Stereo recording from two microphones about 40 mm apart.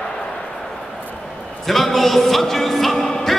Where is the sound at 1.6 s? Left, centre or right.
Centre.